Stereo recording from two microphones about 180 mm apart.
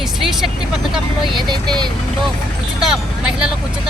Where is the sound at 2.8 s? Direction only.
5° right (ahead or behind).